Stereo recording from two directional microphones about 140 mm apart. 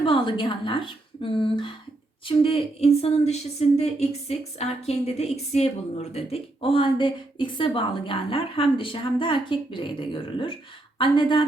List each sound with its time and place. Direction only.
0.0 s a woman's voice: 40° left (ahead or behind)